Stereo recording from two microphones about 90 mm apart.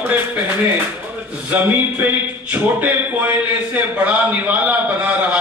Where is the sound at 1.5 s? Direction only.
20° right (ahead or behind).